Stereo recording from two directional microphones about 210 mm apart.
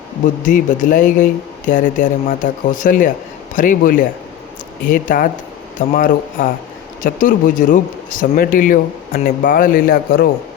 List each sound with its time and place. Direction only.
0.4 s speech: 40° left (ahead or behind)